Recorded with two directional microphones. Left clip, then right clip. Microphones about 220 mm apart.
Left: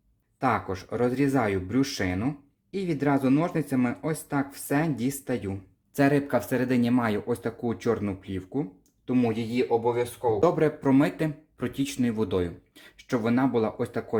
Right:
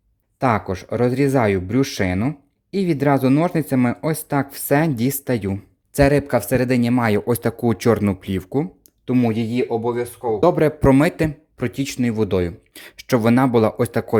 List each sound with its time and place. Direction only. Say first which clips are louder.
0.3 s speech: right 6 dB; 45° right (ahead or behind)